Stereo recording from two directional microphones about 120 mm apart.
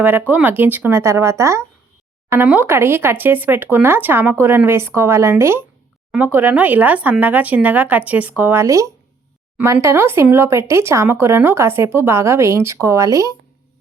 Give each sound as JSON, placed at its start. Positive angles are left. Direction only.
{"t": 0.0, "sound": "speech", "side_deg": -15}